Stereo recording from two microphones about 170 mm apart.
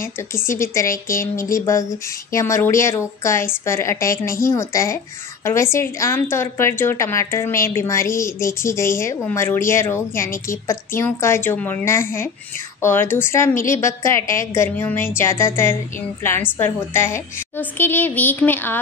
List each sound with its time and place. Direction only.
0.0 s speech: 15° left (ahead or behind)